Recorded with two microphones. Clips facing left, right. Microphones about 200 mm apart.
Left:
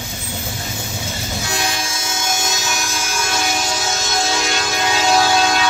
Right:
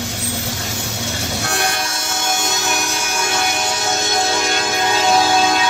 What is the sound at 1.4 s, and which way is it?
Train, 65° right (ahead or behind).